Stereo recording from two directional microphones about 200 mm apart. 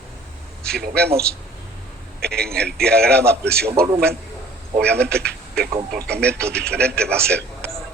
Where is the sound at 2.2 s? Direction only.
50° right (ahead or behind).